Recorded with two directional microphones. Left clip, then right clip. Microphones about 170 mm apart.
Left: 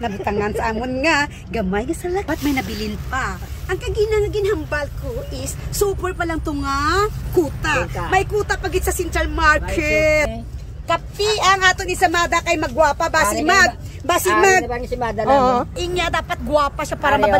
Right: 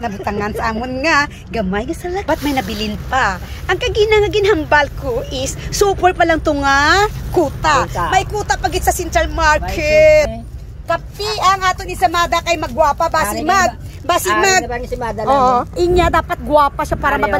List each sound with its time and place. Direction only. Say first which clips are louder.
0.0 s speech: right 1 dB; 20° left (ahead or behind)
15.8 s speech: right 8 dB; 5° left (ahead or behind)